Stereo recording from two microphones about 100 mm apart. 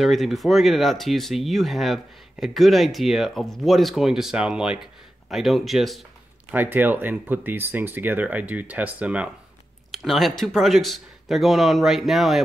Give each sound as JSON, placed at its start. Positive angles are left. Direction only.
{"t": 0.0, "sound": "speech", "side_deg": 0}
{"t": 6.5, "sound": "speech", "side_deg": -20}
{"t": 9.8, "sound": "speech", "side_deg": 0}